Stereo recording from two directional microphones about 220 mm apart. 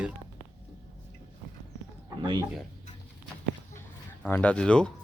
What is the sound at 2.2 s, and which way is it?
Speech, 20° right (ahead or behind).